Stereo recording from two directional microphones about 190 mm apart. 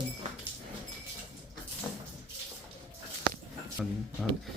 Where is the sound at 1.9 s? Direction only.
10° left (ahead or behind).